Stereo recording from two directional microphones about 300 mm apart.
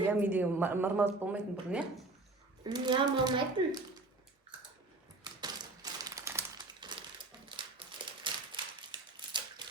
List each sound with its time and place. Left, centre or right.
0.0 s a woman's voice: centre
5.2 s typewriter: centre
7.5 s a sound: centre